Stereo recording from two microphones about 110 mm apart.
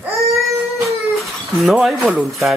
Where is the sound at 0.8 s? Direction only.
Centre (ahead or behind).